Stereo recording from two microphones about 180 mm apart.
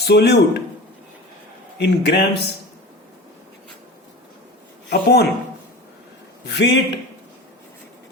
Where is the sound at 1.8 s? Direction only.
65° left (ahead or behind).